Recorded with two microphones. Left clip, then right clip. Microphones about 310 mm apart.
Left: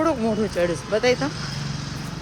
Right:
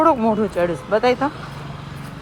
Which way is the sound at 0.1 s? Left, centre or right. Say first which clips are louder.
Right 5 dB; right.